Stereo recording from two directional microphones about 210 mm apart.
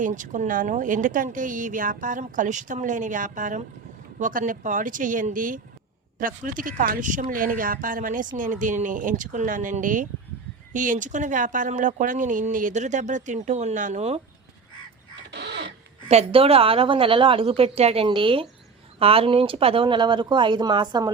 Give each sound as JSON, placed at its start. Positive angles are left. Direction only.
{"t": 0.0, "sound": "speech", "side_deg": -40}
{"t": 15.3, "sound": "crow", "side_deg": -55}
{"t": 16.0, "sound": "a woman's voice", "side_deg": -30}